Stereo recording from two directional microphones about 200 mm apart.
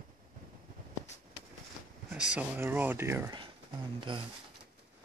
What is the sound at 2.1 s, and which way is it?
Speech, 5° right (ahead or behind).